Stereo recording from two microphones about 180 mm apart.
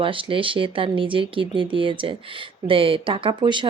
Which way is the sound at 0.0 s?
30° right (ahead or behind).